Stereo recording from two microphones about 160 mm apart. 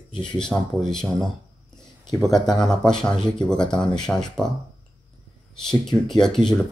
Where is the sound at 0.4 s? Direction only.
5° left (ahead or behind).